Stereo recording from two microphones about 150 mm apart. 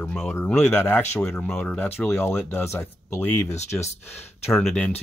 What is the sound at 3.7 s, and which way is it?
Speech, 45° left (ahead or behind).